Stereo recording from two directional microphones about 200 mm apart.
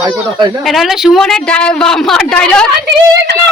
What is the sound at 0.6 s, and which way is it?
A woman's voice, centre (ahead or behind).